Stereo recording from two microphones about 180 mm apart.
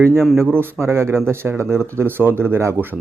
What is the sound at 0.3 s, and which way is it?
Speech, 10° right (ahead or behind).